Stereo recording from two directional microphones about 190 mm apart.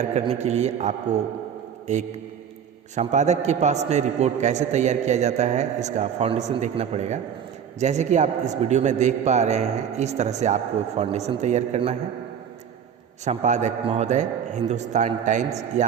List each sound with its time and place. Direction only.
0.0 s a man's voice: 35° right (ahead or behind)
13.2 s a man's voice: 40° right (ahead or behind)